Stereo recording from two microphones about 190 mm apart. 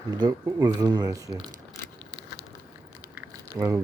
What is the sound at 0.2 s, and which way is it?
Speech, 20° right (ahead or behind).